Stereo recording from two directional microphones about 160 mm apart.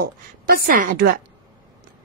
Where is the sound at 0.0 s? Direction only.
65° right (ahead or behind).